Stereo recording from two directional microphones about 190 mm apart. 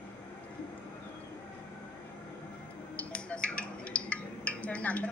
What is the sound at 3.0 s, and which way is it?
Speech, 5° left (ahead or behind).